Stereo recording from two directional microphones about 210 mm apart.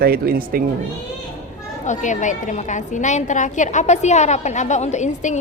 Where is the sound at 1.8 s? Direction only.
35° left (ahead or behind).